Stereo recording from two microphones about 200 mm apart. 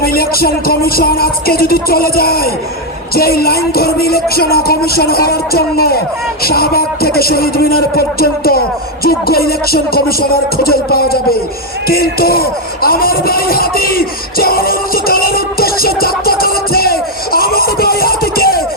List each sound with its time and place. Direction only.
0.0 s music: 50° left (ahead or behind)
11.9 s speech: 50° left (ahead or behind)